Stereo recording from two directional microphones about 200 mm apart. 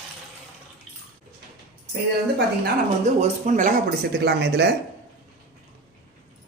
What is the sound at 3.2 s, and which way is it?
Speech, 35° right (ahead or behind).